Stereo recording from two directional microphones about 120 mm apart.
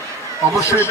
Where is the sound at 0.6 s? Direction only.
20° left (ahead or behind).